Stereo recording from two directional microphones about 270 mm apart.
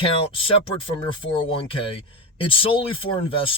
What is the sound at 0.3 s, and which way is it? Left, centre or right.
Speech, centre.